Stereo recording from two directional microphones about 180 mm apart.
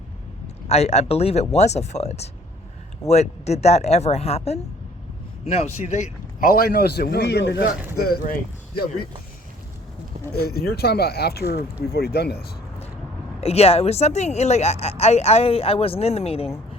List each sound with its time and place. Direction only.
0.4 s a man's voice: 35° left (ahead or behind)
6.5 s a man's voice: 60° left (ahead or behind)
7.9 s speech: 55° left (ahead or behind)
10.4 s a man's voice: 60° left (ahead or behind)
13.4 s speech: 35° left (ahead or behind)